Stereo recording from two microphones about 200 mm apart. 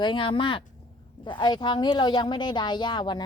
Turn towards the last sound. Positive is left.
turn(degrees=20)  # may be behind; listen again after turning